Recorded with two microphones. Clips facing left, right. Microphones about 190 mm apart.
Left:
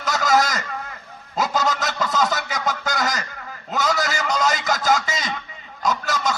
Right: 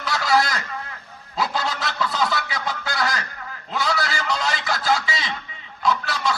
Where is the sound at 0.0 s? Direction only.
45° left (ahead or behind).